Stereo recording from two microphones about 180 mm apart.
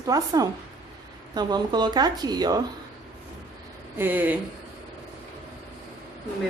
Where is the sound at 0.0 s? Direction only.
20° right (ahead or behind).